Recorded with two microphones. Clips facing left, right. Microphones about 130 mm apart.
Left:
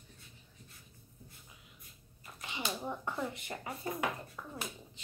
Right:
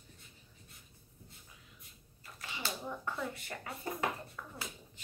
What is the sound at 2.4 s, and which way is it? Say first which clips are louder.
Speech: left 3 dB; 20° left (ahead or behind).